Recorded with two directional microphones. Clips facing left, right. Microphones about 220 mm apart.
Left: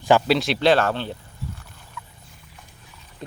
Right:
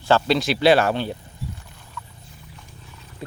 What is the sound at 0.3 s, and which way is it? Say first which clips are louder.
Speech: right 1 dB; centre (ahead or behind).